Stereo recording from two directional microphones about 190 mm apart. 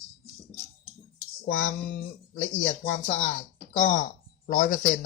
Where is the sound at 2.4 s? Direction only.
45° left (ahead or behind).